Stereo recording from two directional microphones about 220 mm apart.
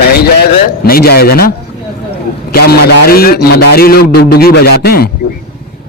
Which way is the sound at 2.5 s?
45° left (ahead or behind).